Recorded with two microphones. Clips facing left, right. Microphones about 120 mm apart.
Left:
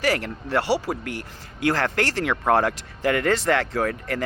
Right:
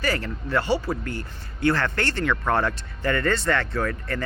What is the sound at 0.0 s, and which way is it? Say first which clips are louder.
Speech: left 3 dB; 80° left.